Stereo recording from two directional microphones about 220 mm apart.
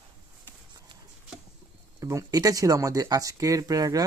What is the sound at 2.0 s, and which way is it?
Speech, 15° right (ahead or behind).